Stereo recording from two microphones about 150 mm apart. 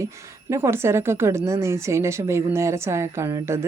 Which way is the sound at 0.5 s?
15° right (ahead or behind).